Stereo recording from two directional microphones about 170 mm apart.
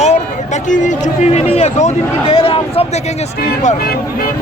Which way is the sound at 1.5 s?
40° left (ahead or behind).